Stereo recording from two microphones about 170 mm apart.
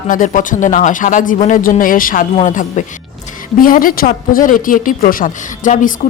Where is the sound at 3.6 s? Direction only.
55° left (ahead or behind).